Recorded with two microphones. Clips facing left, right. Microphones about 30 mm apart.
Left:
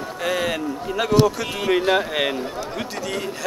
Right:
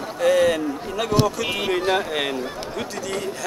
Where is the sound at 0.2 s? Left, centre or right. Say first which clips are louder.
Right 6 dB; centre.